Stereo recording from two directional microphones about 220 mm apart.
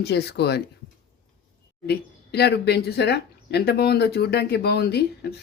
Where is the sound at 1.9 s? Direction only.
50° left (ahead or behind).